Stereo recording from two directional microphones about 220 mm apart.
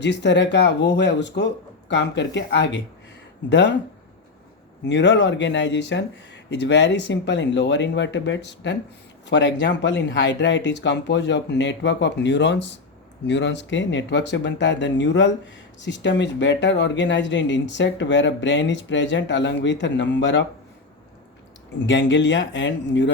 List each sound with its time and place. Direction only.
0.0 s speech: 50° left (ahead or behind)
4.9 s speech: 55° left (ahead or behind)
21.8 s speech: 55° left (ahead or behind)